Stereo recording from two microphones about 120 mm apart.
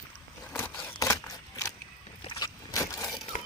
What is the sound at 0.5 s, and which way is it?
Scissors, 15° left (ahead or behind).